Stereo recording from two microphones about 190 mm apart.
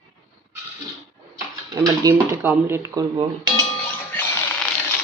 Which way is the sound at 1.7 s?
20° right (ahead or behind).